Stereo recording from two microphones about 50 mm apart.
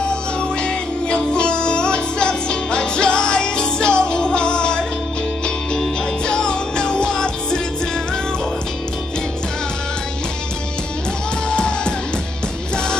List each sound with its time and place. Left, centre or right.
0.1 s music: centre
6.2 s music: centre
11.5 s music: centre